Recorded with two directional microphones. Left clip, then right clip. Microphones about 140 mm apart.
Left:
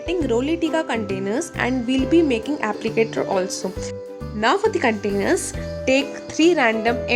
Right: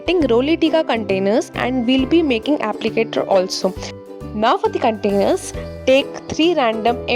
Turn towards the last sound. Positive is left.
turn(degrees=-50)  # may be behind; listen again after turning